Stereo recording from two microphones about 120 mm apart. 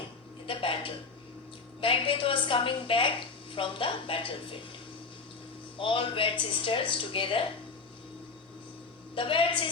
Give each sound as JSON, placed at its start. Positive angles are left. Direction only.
{"t": 0.4, "sound": "a sound", "side_deg": 45}
{"t": 1.8, "sound": "a woman's voice", "side_deg": 45}
{"t": 5.7, "sound": "a woman's voice", "side_deg": 45}
{"t": 9.1, "sound": "a woman's voice", "side_deg": 45}